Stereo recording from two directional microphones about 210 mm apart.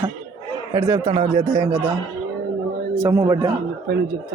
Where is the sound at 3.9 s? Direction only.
50° right (ahead or behind).